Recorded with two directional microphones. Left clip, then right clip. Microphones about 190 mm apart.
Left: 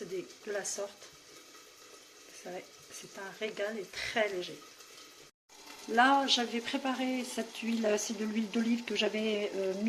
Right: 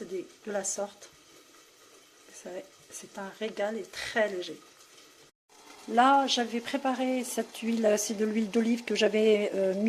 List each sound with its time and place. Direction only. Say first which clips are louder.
0.5 s speech: right 4 dB; 45° right (ahead or behind)
3.4 s speech: right 4 dB; 45° right (ahead or behind)
5.9 s speech: right 3 dB; 50° right (ahead or behind)